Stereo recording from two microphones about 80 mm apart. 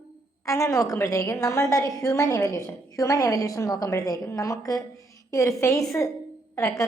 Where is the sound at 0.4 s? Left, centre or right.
Left.